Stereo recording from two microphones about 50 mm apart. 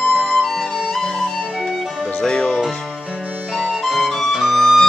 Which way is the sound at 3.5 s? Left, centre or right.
Centre.